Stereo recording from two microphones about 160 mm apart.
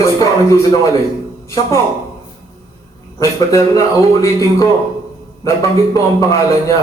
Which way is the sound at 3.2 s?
20° left (ahead or behind).